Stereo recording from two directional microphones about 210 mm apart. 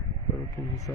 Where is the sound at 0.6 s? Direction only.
15° left (ahead or behind).